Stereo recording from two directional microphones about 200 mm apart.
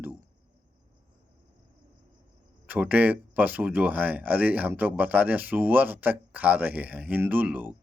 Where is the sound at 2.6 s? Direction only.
5° right (ahead or behind).